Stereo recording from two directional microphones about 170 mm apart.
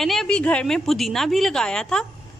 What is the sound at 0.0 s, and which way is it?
A woman's voice, centre (ahead or behind).